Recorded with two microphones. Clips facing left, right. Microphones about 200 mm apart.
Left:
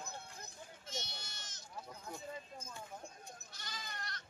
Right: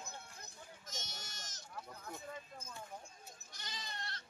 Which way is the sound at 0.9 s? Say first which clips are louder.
Left 5 dB; 45° right (ahead or behind).